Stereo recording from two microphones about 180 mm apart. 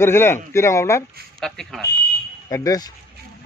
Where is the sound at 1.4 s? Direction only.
5° left (ahead or behind).